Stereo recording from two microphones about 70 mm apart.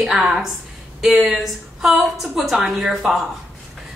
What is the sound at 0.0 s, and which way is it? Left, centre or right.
Speech, centre.